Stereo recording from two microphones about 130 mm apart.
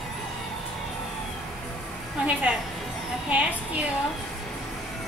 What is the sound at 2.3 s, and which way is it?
A woman's voice, 10° right (ahead or behind).